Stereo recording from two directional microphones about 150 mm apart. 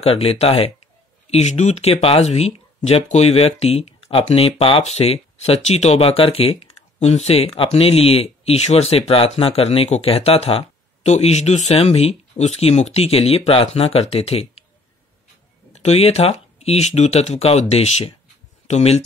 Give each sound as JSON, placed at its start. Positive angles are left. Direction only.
{"t": 0.0, "sound": "speech", "side_deg": 40}
{"t": 15.7, "sound": "speech", "side_deg": 45}